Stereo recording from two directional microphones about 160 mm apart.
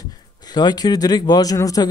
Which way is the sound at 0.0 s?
25° left (ahead or behind).